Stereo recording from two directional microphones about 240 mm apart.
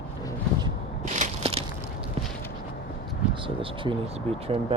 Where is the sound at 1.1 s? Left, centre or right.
Right.